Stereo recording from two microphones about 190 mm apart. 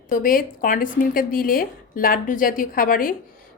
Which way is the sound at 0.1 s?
45° left (ahead or behind).